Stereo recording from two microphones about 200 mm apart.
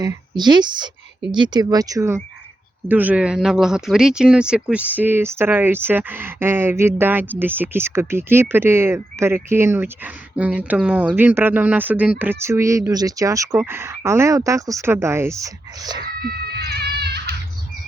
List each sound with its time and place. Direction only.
0.0 s speech: 20° right (ahead or behind)
16.2 s goat: 55° right (ahead or behind)